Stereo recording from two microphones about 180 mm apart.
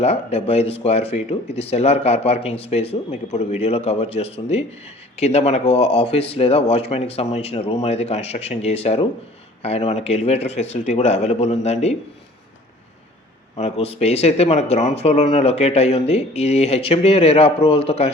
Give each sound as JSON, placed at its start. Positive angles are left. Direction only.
{"t": 0.0, "sound": "speech", "side_deg": 35}
{"t": 13.6, "sound": "speech", "side_deg": 35}